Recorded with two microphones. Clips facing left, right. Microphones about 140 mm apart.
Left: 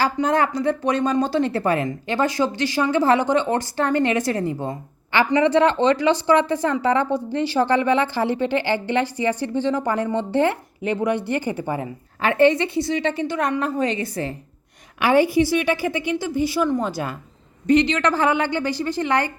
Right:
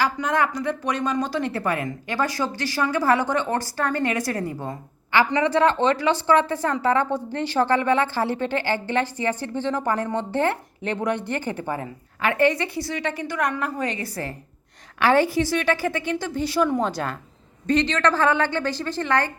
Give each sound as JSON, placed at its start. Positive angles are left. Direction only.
{"t": 0.0, "sound": "speech", "side_deg": 30}
{"t": 12.2, "sound": "a woman's voice", "side_deg": 25}